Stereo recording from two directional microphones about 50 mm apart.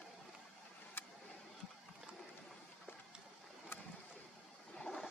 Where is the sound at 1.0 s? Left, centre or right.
Left.